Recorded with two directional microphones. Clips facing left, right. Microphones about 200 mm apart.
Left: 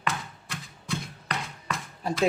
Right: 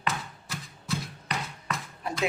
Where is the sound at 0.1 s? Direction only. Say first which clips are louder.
Even; centre (ahead or behind).